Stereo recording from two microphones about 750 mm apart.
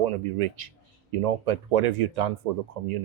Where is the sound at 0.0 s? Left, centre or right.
Right.